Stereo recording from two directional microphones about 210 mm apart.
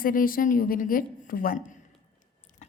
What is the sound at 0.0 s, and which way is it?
A woman's voice, 40° left (ahead or behind).